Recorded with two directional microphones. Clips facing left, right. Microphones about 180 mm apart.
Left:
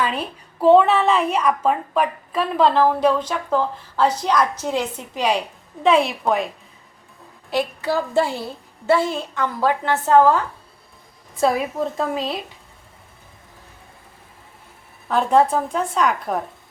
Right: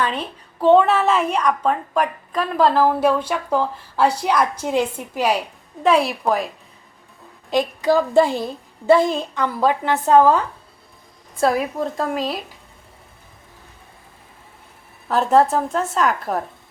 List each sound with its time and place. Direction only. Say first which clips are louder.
0.0 s a child's voice: even; 5° left (ahead or behind)
7.5 s a woman's voice: right 4 dB; 15° right (ahead or behind)
11.3 s a child's voice: even; centre (ahead or behind)
15.0 s a child's voice: right 1 dB; centre (ahead or behind)